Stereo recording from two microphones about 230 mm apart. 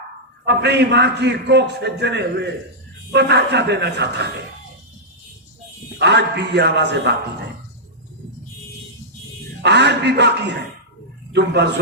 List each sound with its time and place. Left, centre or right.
0.4 s a man's voice: right
6.0 s a man's voice: right
9.6 s a man's voice: right